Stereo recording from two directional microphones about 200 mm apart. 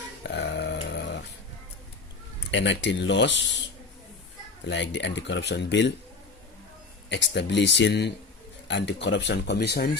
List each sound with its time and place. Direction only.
0.2 s a sound: 60° left (ahead or behind)
2.5 s speech: 65° left (ahead or behind)
4.7 s speech: 65° left (ahead or behind)
7.1 s speech: 60° left (ahead or behind)